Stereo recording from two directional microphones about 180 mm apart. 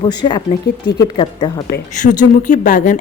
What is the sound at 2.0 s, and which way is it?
Speech, 45° left (ahead or behind).